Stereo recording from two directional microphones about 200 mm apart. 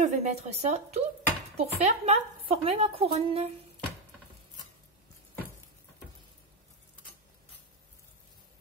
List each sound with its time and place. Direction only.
0.0 s a woman's voice: 35° right (ahead or behind)